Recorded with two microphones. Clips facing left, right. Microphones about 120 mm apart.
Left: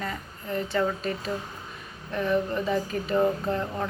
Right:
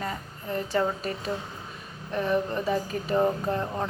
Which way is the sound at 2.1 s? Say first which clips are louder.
Even; 15° right (ahead or behind).